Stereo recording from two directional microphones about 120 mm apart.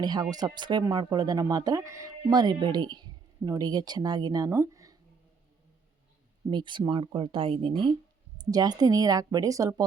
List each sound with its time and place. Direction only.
0.0 s speech: 35° right (ahead or behind)
2.3 s speech: 35° right (ahead or behind)
6.5 s speech: 40° right (ahead or behind)
8.4 s speech: 35° right (ahead or behind)